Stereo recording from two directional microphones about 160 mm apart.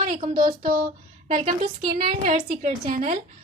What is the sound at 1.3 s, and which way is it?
Speech, 50° right (ahead or behind).